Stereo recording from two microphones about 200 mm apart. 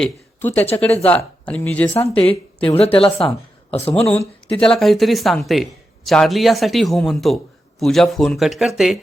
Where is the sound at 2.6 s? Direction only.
30° left (ahead or behind).